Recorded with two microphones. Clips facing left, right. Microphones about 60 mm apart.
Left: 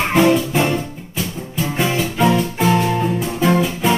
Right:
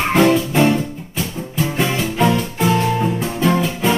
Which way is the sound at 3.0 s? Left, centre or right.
Centre.